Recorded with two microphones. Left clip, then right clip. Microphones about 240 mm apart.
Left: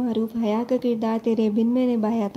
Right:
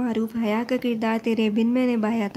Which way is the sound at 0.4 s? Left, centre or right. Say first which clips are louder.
Left 2 dB; centre.